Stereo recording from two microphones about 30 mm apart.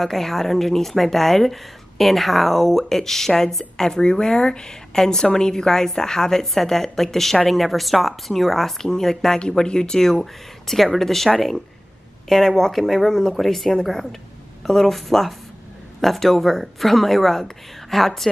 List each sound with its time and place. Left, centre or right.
0.0 s speech: centre
6.4 s speech: centre
10.7 s a woman's voice: centre